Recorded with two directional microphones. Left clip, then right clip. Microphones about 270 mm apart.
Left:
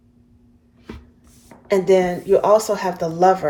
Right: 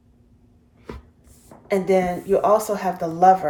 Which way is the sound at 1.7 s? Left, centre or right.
Left.